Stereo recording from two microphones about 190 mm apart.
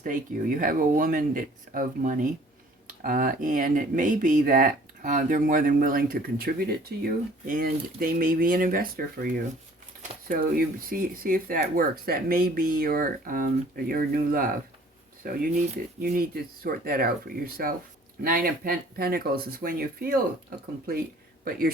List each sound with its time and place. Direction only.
0.0 s speech: 45° right (ahead or behind)